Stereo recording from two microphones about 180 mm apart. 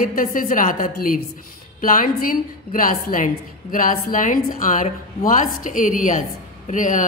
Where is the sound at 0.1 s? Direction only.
50° left (ahead or behind).